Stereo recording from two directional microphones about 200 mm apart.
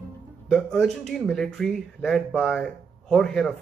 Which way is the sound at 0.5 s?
Centre (ahead or behind).